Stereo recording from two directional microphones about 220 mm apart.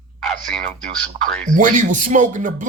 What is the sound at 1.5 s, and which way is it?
Speech, 35° right (ahead or behind).